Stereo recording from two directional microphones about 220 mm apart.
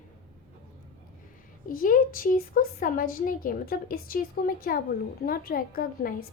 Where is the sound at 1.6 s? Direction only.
40° left (ahead or behind).